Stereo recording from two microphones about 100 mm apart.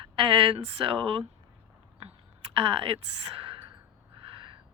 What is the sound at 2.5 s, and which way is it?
Speech, 65° right (ahead or behind).